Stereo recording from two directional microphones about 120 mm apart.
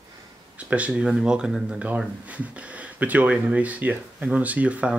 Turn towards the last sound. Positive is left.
turn(degrees=-10)  # may be behind; listen again after turning